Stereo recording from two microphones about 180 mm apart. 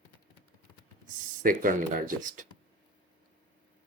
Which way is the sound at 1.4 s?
50° right (ahead or behind).